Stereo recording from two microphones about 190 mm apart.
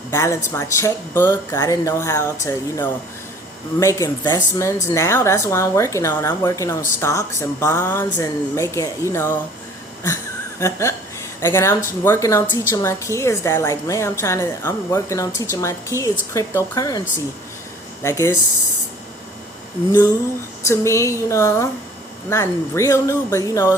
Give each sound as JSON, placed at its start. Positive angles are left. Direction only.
{"t": 0.1, "sound": "a woman's voice", "side_deg": 15}
{"t": 10.6, "sound": "a woman's voice", "side_deg": 15}
{"t": 18.0, "sound": "a woman's voice", "side_deg": 15}
{"t": 20.7, "sound": "a woman's voice", "side_deg": 15}